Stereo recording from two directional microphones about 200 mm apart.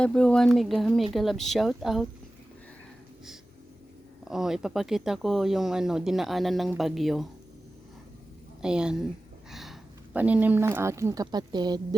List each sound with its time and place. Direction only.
0.0 s speech: 5° left (ahead or behind)
4.3 s speech: centre (ahead or behind)
8.6 s speech: 5° right (ahead or behind); by 11.9 s 20° right (ahead or behind)